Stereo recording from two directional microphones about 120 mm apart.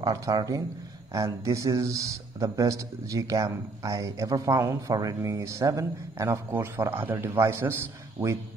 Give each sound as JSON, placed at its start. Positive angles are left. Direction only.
{"t": 0.0, "sound": "speech", "side_deg": -30}